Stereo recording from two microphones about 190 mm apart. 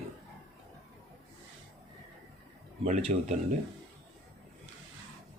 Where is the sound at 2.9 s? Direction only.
40° right (ahead or behind).